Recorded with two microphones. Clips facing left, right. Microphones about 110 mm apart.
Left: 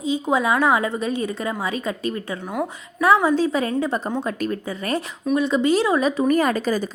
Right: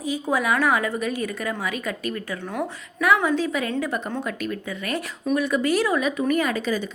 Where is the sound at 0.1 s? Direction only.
25° left (ahead or behind).